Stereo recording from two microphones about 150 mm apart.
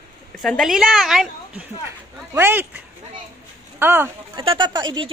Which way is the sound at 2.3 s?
15° right (ahead or behind).